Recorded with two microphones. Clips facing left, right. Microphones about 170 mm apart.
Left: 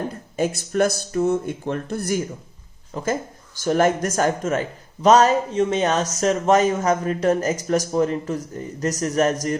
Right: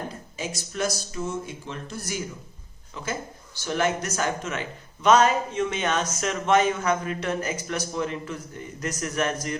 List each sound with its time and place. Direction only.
0.3 s speech: 55° left (ahead or behind)